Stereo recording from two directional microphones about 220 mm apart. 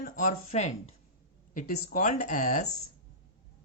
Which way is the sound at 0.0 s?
35° left (ahead or behind).